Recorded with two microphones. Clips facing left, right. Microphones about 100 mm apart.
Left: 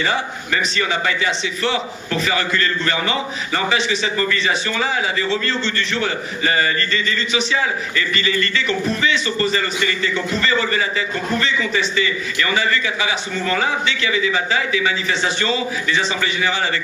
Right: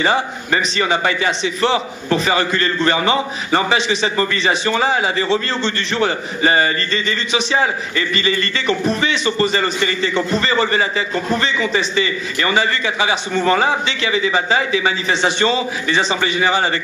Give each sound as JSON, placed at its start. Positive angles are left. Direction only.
{"t": 0.0, "sound": "a man's voice", "side_deg": -30}